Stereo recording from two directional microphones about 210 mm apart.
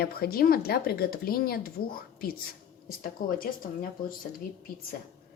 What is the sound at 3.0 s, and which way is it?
Speech, 40° left (ahead or behind).